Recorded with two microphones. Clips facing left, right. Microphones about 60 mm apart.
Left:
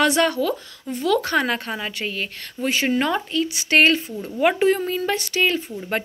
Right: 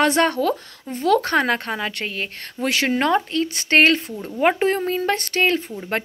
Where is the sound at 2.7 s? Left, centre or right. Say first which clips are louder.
Even; right.